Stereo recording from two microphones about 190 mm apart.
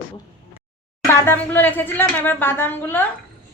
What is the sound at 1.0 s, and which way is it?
A woman's voice, 15° left (ahead or behind).